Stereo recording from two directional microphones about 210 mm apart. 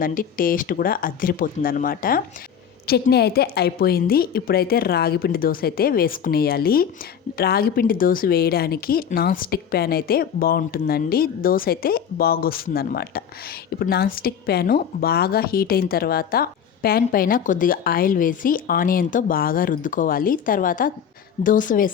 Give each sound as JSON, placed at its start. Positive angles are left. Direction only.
{"t": 0.0, "sound": "a woman's voice", "side_deg": 40}